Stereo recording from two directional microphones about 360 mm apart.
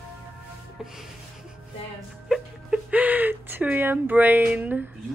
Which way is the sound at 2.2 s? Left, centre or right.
Centre.